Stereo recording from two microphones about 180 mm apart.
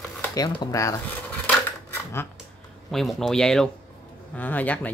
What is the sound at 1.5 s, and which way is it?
Dishes, 15° left (ahead or behind).